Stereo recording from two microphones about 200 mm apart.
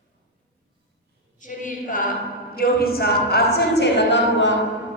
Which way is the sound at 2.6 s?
50° left (ahead or behind).